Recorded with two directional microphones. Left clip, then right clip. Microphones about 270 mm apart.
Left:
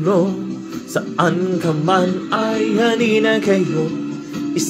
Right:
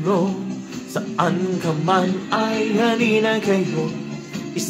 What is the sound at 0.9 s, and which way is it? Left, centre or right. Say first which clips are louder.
Music: left 4 dB; centre.